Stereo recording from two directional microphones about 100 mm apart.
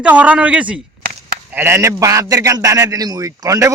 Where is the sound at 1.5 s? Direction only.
25° right (ahead or behind).